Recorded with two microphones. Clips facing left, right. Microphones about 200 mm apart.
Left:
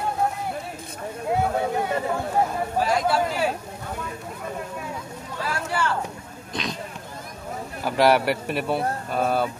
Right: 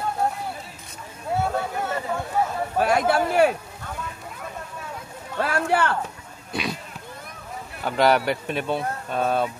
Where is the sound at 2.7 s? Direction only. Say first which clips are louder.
Right 2 dB; 60° right (ahead or behind).